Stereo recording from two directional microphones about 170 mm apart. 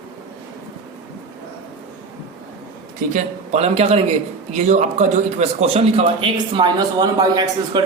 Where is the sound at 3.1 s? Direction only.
40° right (ahead or behind).